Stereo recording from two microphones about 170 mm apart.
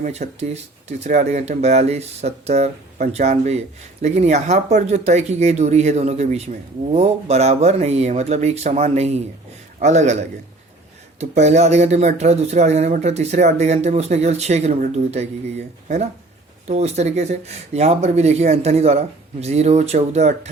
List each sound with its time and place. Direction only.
0.0 s a man's voice: 40° right (ahead or behind)
11.2 s speech: 45° right (ahead or behind)